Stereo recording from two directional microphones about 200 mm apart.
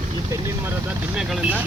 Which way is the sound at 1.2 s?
5° right (ahead or behind).